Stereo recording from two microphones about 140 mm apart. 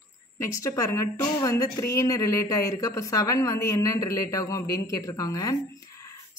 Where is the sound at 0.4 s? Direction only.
25° left (ahead or behind).